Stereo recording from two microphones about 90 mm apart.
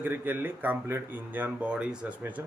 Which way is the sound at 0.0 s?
20° right (ahead or behind).